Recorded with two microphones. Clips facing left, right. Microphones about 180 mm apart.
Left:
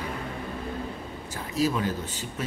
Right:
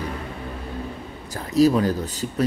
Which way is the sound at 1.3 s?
40° right (ahead or behind).